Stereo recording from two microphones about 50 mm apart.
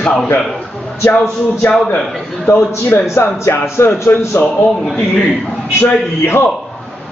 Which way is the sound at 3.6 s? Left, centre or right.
Left.